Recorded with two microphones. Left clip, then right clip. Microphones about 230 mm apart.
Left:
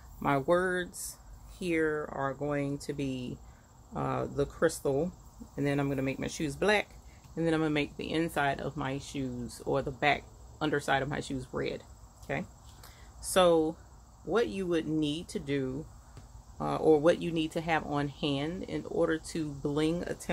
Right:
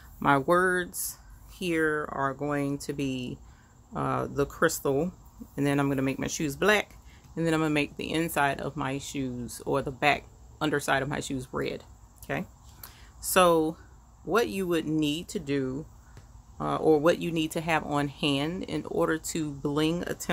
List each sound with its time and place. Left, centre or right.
0.2 s speech: right